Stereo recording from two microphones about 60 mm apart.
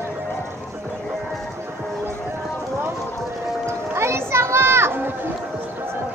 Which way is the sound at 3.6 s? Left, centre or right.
Right.